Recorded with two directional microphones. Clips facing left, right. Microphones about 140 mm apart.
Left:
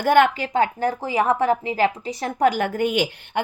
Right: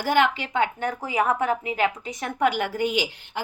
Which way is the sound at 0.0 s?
55° left (ahead or behind).